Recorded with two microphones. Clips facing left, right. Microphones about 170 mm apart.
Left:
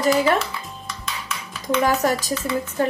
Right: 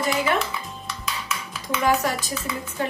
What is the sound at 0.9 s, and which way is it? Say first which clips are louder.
Dishes: right 1 dB; 5° right (ahead or behind).